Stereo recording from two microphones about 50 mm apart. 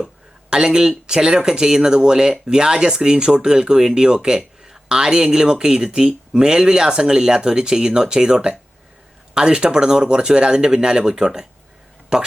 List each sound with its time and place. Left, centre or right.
0.5 s speech: centre